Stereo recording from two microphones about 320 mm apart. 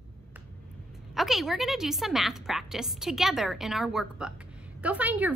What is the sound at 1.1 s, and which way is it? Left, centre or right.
A woman's voice, centre.